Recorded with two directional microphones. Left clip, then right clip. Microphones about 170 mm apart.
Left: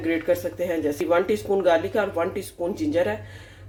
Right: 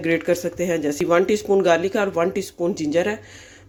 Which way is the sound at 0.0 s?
55° right (ahead or behind).